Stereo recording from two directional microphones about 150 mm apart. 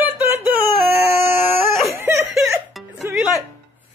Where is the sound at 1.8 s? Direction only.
20° right (ahead or behind).